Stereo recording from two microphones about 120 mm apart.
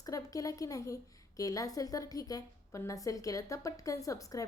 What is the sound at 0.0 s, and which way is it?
A woman's voice, 30° left (ahead or behind).